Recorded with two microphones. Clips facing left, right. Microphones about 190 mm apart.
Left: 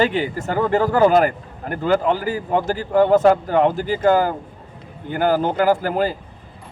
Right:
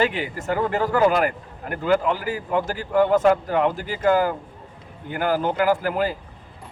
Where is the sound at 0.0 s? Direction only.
35° left (ahead or behind).